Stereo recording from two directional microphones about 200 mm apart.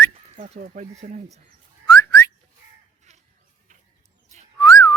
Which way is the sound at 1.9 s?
15° left (ahead or behind).